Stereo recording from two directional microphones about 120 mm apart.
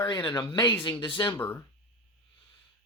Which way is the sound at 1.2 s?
20° left (ahead or behind).